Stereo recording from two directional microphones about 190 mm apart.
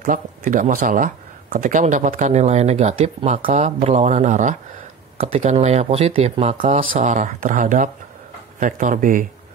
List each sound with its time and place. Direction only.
0.0 s speech: 45° right (ahead or behind)